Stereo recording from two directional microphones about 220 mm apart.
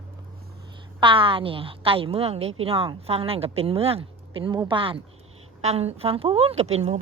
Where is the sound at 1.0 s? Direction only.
25° right (ahead or behind).